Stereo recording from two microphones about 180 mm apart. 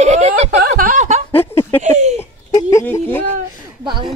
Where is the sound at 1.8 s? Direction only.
40° right (ahead or behind).